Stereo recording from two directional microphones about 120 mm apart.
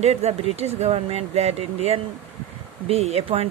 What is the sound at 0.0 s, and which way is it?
Speech, 60° right (ahead or behind).